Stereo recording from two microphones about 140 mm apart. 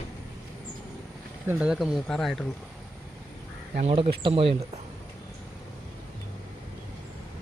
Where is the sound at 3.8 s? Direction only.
45° right (ahead or behind).